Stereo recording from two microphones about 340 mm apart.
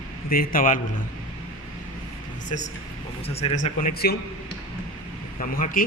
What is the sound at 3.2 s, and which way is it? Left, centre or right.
Speech, centre.